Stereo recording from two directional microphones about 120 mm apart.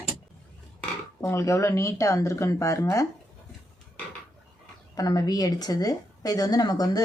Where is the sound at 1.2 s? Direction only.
25° left (ahead or behind).